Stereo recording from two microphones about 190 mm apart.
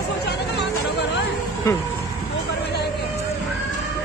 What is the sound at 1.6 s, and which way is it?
Music, 15° left (ahead or behind).